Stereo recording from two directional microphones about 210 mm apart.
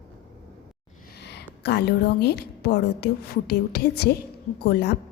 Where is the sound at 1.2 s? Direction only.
55° left (ahead or behind).